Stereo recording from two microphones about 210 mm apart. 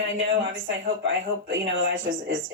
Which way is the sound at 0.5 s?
65° right (ahead or behind).